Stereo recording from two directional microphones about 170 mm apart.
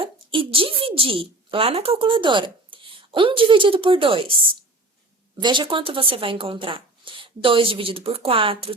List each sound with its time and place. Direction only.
0.0 s a woman's voice: 30° right (ahead or behind)
5.4 s speech: 25° right (ahead or behind)